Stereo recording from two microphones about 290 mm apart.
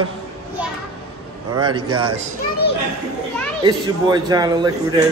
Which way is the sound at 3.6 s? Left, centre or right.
Centre.